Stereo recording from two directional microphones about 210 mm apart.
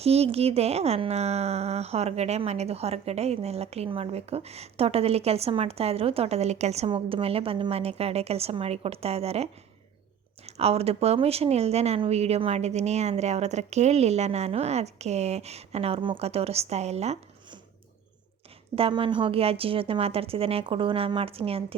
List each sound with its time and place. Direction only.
0.0 s a woman's voice: 30° right (ahead or behind)
18.8 s speech: 25° right (ahead or behind)